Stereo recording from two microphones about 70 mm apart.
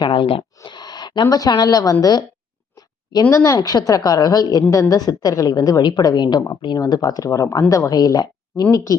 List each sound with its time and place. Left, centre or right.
0.6 s a woman's voice: left
2.7 s a sound: left
3.2 s a woman's voice: left
8.7 s a woman's voice: left